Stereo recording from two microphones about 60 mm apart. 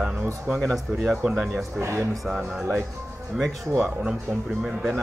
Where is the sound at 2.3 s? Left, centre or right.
Centre.